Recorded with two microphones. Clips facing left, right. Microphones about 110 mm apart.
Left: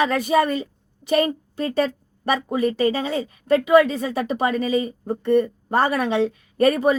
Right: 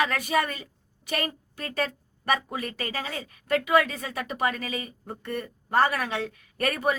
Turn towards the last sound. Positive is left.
turn(degrees=25)  # may be behind; listen again after turning